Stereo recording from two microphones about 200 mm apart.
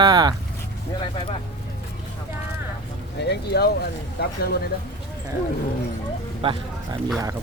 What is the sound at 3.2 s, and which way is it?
Speech, 55° left (ahead or behind).